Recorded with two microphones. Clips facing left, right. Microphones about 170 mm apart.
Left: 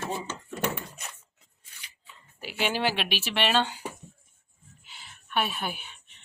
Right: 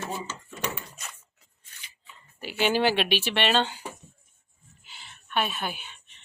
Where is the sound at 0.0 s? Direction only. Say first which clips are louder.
Left 1 dB; 55° left (ahead or behind).